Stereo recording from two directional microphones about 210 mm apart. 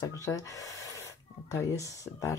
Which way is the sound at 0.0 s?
15° left (ahead or behind).